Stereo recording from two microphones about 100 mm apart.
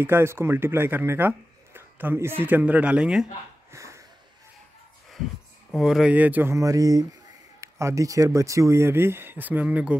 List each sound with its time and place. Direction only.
0.0 s speech: 25° right (ahead or behind)
3.7 s sniff: 30° right (ahead or behind)
5.7 s speech: 5° right (ahead or behind)
6.1 s speech: 15° right (ahead or behind)
6.5 s speech: 35° right (ahead or behind); by 9.9 s 15° right (ahead or behind)